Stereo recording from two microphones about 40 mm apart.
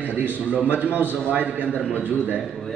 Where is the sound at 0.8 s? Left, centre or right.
Right.